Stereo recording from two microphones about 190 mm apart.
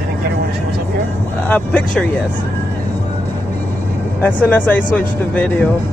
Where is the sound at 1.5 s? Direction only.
5° left (ahead or behind).